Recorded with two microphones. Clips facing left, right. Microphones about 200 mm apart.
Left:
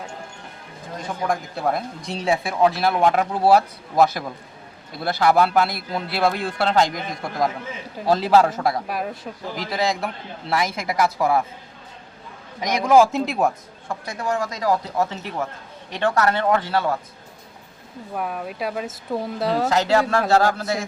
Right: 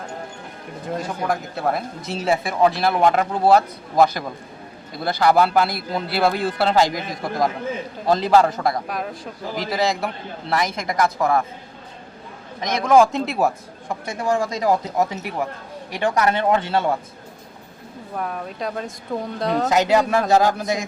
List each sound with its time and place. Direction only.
1.3 s speech: centre (ahead or behind)
12.5 s speech: 10° left (ahead or behind)
13.8 s speech: 25° right (ahead or behind)
18.2 s speech: 5° left (ahead or behind)
19.6 s speech: 15° right (ahead or behind)